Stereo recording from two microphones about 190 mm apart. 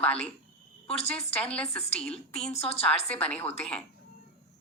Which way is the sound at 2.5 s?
30° left (ahead or behind).